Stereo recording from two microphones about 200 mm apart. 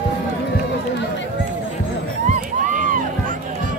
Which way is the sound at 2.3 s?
40° right (ahead or behind).